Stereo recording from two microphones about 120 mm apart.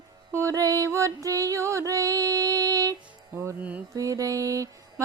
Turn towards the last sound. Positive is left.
turn(degrees=-25)  # may be behind; listen again after turning